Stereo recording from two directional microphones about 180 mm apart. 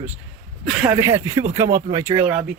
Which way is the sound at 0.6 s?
5° right (ahead or behind).